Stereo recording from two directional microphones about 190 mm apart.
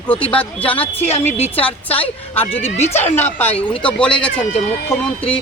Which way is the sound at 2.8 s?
35° left (ahead or behind).